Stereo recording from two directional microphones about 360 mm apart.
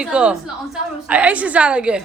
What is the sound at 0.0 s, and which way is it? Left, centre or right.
A woman's voice, centre.